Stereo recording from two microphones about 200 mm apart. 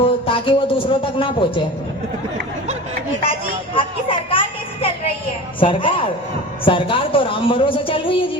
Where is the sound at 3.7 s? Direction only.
25° left (ahead or behind).